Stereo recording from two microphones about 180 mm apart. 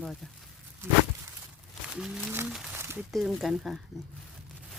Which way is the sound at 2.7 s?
15° right (ahead or behind).